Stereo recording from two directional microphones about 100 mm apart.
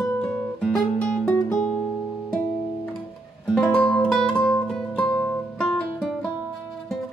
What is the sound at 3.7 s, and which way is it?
Music, 10° left (ahead or behind).